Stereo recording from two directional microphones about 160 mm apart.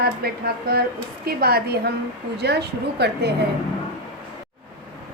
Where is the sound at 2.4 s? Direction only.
90° right.